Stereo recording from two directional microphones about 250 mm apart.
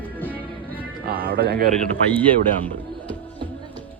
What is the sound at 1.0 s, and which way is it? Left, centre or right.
Music, right.